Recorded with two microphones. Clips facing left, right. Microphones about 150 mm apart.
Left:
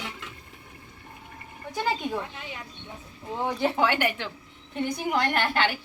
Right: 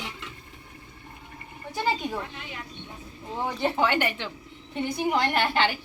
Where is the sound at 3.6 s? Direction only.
10° left (ahead or behind).